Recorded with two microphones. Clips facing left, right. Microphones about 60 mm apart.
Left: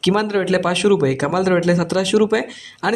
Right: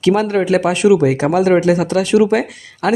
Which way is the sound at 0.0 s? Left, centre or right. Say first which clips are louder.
Right 3 dB; right.